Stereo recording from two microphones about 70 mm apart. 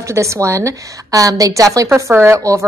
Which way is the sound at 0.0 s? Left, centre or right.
Right.